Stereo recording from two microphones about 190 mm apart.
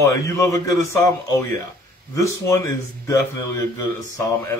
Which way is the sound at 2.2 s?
15° left (ahead or behind).